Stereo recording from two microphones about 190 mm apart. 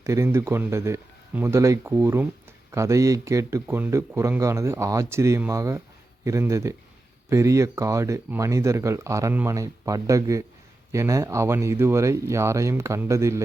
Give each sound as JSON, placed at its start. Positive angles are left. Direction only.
{"t": 0.0, "sound": "speech", "side_deg": -15}